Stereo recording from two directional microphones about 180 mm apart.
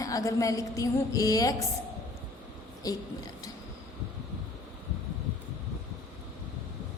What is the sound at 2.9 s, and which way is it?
Speech, 20° left (ahead or behind).